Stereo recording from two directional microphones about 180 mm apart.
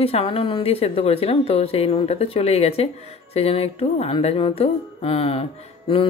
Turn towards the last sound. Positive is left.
turn(degrees=30)  # may be behind; listen again after turning